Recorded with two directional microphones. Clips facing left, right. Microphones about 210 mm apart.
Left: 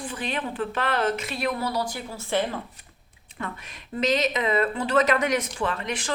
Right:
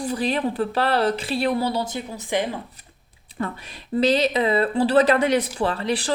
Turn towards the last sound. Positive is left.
turn(degrees=-35)  # may be behind; listen again after turning